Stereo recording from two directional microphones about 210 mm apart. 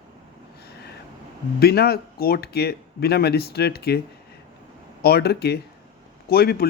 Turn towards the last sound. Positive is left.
turn(degrees=45)  # may be behind; listen again after turning